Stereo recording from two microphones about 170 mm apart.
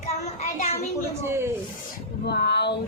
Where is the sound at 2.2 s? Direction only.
75° left (ahead or behind).